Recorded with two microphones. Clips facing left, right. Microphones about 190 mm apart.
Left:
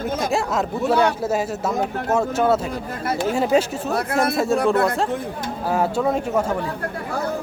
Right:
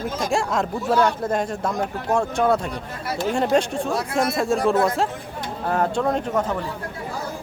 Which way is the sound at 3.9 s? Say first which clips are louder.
Left 6 dB; 60° left (ahead or behind).